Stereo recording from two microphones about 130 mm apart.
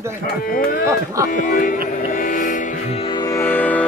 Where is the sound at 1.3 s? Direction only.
90° left.